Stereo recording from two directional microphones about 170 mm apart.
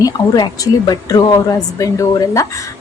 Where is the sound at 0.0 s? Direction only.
20° left (ahead or behind).